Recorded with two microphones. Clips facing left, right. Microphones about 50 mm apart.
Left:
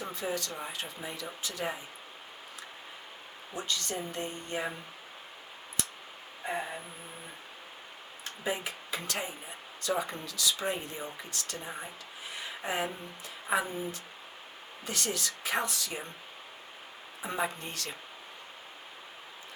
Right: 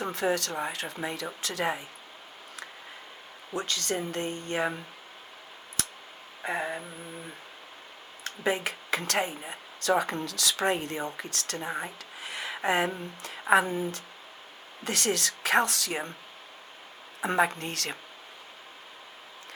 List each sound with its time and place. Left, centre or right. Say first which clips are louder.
0.0 s speech: right 7 dB; right
3.5 s speech: right 4 dB; right
6.4 s speech: right 3 dB; right
8.2 s speech: right 6 dB; right
17.2 s speech: right 8 dB; right